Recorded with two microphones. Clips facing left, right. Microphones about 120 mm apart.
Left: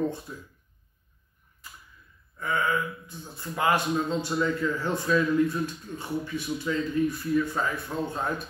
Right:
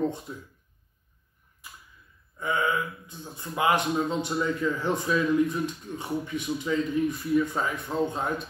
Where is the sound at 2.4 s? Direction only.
20° right (ahead or behind).